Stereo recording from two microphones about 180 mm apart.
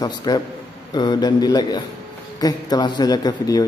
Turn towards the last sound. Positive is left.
turn(degrees=20)  # may be behind; listen again after turning